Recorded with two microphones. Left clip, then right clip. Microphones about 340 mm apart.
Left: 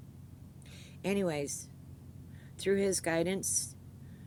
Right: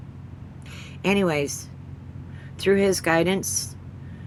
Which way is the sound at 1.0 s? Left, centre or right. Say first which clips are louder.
Right 11 dB; left.